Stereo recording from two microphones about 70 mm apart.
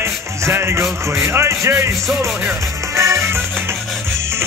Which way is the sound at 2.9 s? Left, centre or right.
Right.